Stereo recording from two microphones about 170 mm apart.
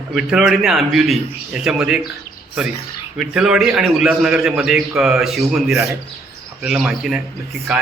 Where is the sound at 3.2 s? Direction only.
5° right (ahead or behind).